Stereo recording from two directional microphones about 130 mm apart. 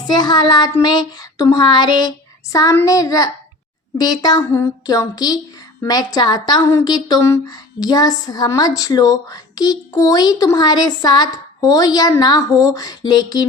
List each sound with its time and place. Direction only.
0.1 s child singing: 35° left (ahead or behind)
2.8 s a woman's voice: 25° left (ahead or behind)
3.9 s child singing: 30° left (ahead or behind)
4.5 s a woman's voice: 25° left (ahead or behind)
5.8 s child singing: 30° left (ahead or behind)
7.3 s a woman's voice: 30° left (ahead or behind)